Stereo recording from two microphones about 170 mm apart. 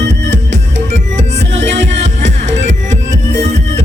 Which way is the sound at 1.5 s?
90° right.